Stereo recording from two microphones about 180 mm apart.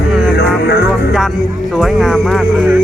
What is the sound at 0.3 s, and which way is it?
Music, 65° left (ahead or behind).